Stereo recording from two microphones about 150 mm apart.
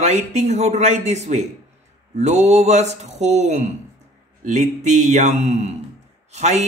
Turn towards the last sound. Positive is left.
turn(degrees=-50)  # may be behind; listen again after turning